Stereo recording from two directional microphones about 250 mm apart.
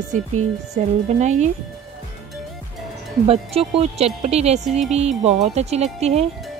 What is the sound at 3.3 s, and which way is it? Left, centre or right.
Speech, right.